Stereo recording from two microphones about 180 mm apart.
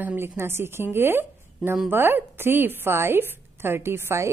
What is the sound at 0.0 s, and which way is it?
A woman's voice, 10° right (ahead or behind).